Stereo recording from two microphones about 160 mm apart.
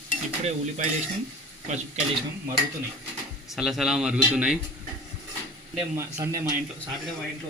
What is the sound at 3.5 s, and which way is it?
A man's voice, centre (ahead or behind).